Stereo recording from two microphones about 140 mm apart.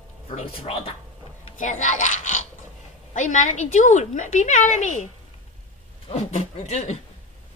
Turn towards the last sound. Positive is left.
turn(degrees=50)  # may be behind; listen again after turning